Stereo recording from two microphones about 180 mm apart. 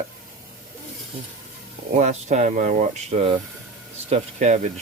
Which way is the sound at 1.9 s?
40° right (ahead or behind).